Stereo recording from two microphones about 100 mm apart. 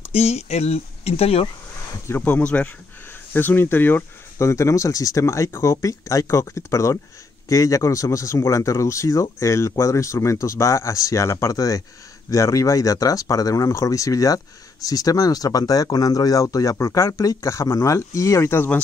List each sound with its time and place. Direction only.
0.1 s speech: 90° left
2.0 s speech: 20° left (ahead or behind)